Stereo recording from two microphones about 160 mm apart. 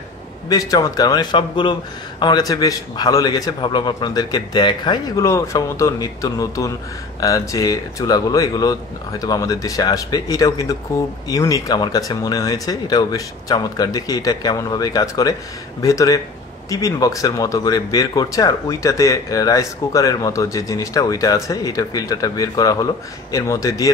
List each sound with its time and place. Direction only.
0.5 s speech: 20° left (ahead or behind)